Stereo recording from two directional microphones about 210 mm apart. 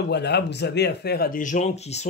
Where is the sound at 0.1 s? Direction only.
55° left (ahead or behind).